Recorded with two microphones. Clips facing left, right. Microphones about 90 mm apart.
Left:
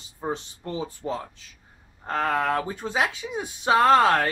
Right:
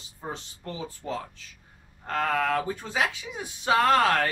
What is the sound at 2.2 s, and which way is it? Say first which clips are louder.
Speech: left 2 dB; 20° left (ahead or behind).